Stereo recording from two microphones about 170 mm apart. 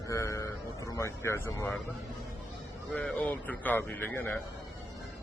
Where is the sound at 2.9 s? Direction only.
5° left (ahead or behind).